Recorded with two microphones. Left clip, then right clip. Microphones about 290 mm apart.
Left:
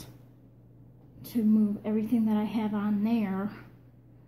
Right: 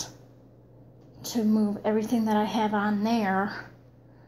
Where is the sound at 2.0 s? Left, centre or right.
Right.